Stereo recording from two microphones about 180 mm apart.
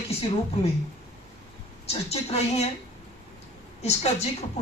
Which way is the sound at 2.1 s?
35° left (ahead or behind).